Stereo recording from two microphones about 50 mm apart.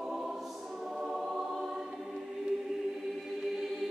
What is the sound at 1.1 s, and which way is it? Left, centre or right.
Music, centre.